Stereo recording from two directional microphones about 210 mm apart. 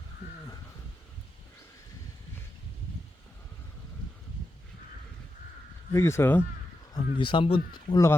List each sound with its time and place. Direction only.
5.9 s speech: 10° left (ahead or behind)
6.9 s speech: 25° left (ahead or behind)